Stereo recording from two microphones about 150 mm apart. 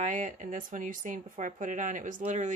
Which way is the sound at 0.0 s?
60° right (ahead or behind).